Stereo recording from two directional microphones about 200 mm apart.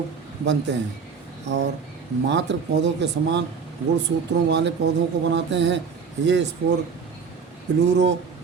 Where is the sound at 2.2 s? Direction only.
60° right (ahead or behind).